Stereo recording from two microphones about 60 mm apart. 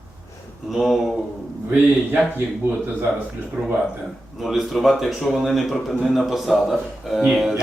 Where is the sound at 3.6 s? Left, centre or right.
Right.